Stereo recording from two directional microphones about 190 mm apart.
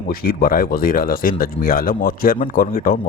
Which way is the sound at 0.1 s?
50° left (ahead or behind).